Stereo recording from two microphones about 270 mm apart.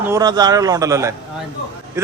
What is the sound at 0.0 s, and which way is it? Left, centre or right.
A man's voice, centre.